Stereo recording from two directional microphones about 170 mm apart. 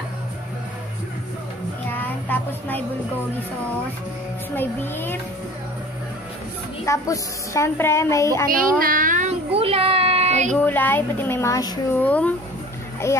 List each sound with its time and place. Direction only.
1.9 s child singing: 10° left (ahead or behind)
4.6 s a woman's voice: 10° left (ahead or behind)
6.9 s a woman's voice: 15° left (ahead or behind)
8.5 s child singing: 55° right (ahead or behind); by 10.5 s 40° right (ahead or behind)
10.5 s a woman's voice: 10° left (ahead or behind)
11.9 s a woman's voice: 10° left (ahead or behind)